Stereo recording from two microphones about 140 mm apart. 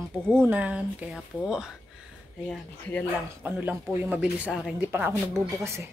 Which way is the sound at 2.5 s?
10° left (ahead or behind).